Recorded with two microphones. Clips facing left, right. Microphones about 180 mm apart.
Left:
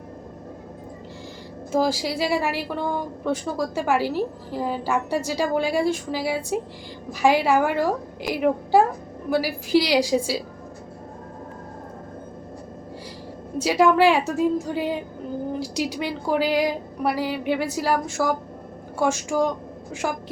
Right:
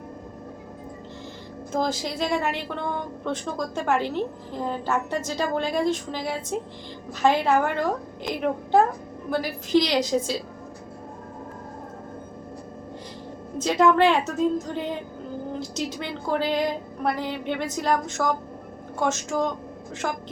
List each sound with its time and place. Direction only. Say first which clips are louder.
1.7 s a woman's voice: left 4 dB; 10° left (ahead or behind)
13.6 s a woman's voice: left 1 dB; 10° left (ahead or behind)